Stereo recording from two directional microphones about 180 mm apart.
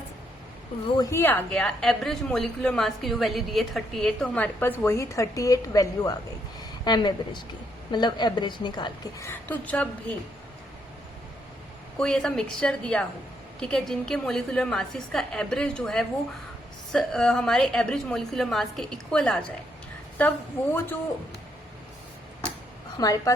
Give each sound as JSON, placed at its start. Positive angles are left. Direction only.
{"t": 0.9, "sound": "a woman's voice", "side_deg": 15}
{"t": 11.9, "sound": "a woman's voice", "side_deg": 5}
{"t": 20.7, "sound": "a man's voice", "side_deg": 10}
{"t": 23.0, "sound": "a woman's voice", "side_deg": 20}